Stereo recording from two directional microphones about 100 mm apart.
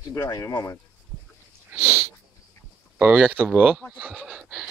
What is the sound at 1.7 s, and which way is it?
Sniff, 20° right (ahead or behind).